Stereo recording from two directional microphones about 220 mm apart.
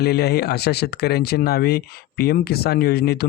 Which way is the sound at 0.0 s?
45° left (ahead or behind).